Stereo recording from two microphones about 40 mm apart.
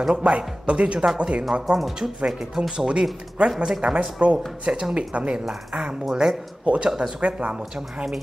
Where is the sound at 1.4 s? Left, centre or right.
Centre.